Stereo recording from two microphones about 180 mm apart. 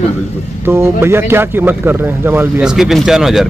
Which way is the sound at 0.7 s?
15° right (ahead or behind).